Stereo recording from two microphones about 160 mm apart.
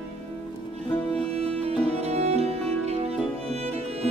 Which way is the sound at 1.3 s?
40° right (ahead or behind).